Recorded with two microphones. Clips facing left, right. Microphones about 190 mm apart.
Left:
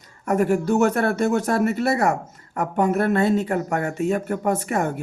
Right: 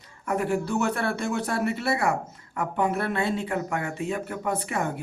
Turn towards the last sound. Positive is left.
turn(degrees=45)  # may be behind; listen again after turning